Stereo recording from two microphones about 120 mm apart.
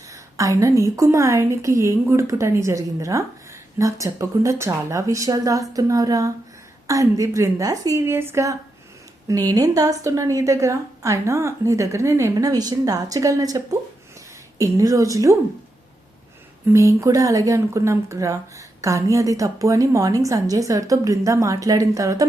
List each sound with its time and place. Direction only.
0.1 s speech: 25° right (ahead or behind)
5.7 s humming: 30° right (ahead or behind)
6.8 s speech: 25° right (ahead or behind)
14.6 s speech: 25° right (ahead or behind)
16.7 s speech: 25° right (ahead or behind)